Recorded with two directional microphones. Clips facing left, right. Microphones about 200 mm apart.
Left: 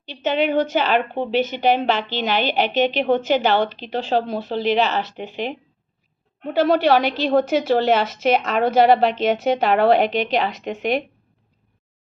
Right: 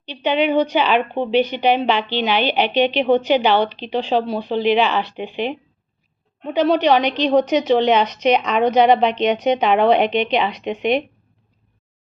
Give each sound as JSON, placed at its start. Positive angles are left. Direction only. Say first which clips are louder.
{"t": 0.0, "sound": "a woman's voice", "louder": "right 2 dB", "side_deg": 45}
{"t": 6.5, "sound": "a woman's voice", "louder": "right 1 dB", "side_deg": 10}
{"t": 10.0, "sound": "a woman's voice", "louder": "right 2 dB", "side_deg": 45}